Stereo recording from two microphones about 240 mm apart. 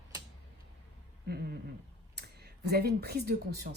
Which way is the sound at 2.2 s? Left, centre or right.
Right.